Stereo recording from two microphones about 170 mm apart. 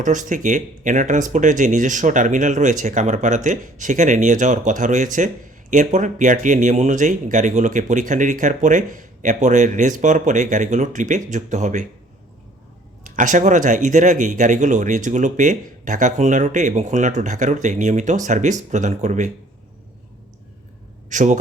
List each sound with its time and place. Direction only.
0.0 s speech: 50° right (ahead or behind)
13.1 s speech: 50° right (ahead or behind)
21.1 s speech: 45° right (ahead or behind)